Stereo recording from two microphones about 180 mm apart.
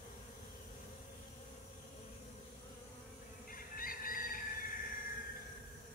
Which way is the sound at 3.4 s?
50° left (ahead or behind).